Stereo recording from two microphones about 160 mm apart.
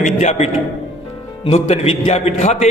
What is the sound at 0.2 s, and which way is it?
A man's voice, 40° left (ahead or behind).